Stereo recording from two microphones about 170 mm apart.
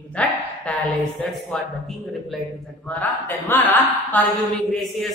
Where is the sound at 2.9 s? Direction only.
10° left (ahead or behind).